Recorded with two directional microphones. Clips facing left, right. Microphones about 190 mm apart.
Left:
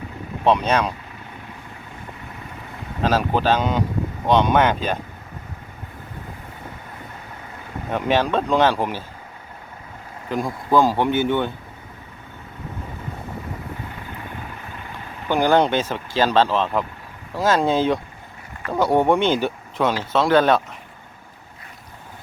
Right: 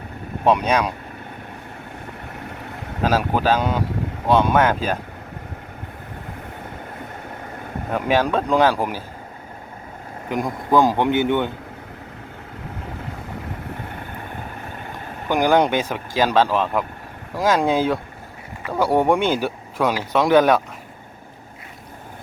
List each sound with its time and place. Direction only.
0.4 s speech: 10° right (ahead or behind)
3.0 s speech: 10° right (ahead or behind)
7.9 s speech: 5° right (ahead or behind)
10.2 s speech: 15° right (ahead or behind)
15.3 s speech: 15° right (ahead or behind)